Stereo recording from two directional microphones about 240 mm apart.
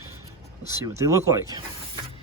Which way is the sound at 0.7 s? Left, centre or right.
Centre.